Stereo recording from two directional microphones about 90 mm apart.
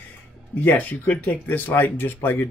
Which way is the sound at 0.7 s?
20° left (ahead or behind).